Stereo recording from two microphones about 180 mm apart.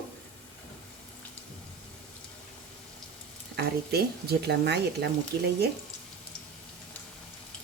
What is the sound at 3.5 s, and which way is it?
Speech, 60° right (ahead or behind).